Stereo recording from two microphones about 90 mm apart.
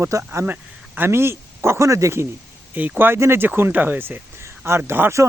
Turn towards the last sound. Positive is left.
turn(degrees=-30)  # may be behind; listen again after turning